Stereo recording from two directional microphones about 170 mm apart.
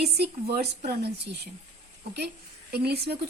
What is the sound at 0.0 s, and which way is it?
Speech, 70° right (ahead or behind).